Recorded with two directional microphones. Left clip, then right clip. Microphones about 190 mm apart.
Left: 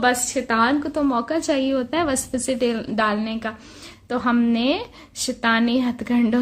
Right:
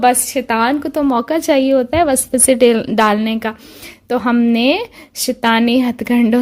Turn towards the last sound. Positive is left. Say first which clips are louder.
# right 7 dB
turn(degrees=-40)  # may be behind; listen again after turning